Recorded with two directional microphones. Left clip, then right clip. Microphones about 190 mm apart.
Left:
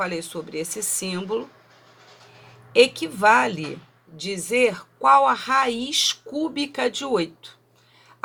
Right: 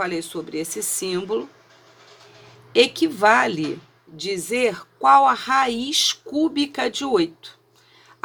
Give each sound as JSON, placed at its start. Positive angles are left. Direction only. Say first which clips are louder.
{"t": 0.0, "sound": "speech", "louder": "right 2 dB", "side_deg": -35}
{"t": 2.7, "sound": "speech", "louder": "even", "side_deg": -35}